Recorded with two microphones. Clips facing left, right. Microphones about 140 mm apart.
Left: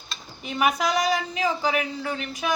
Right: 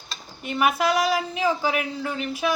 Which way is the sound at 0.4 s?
Centre (ahead or behind).